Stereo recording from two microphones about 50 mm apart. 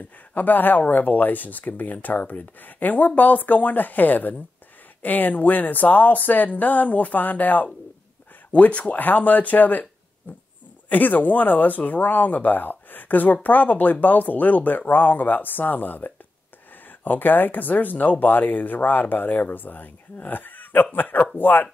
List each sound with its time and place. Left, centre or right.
0.0 s speech: left
10.9 s speech: left